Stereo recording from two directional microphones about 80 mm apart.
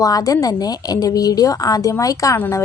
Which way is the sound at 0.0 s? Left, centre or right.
Left.